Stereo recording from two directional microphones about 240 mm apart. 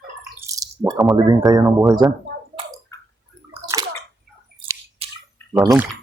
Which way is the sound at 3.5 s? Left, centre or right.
Centre.